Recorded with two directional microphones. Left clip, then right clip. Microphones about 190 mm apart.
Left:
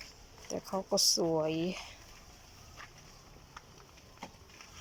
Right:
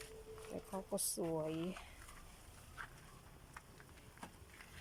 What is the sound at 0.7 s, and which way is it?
Speech, 20° left (ahead or behind).